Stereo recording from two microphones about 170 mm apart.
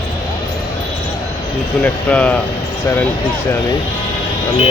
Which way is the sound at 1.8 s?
10° left (ahead or behind).